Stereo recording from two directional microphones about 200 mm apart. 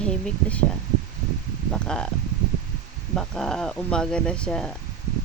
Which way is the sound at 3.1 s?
Centre (ahead or behind).